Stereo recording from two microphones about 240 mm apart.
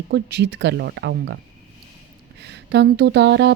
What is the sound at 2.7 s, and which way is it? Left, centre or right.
Speech, right.